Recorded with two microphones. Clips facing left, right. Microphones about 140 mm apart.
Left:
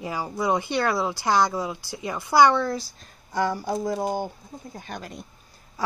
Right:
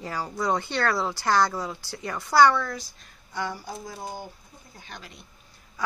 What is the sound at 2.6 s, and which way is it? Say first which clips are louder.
Speech: left 5 dB; 30° left (ahead or behind).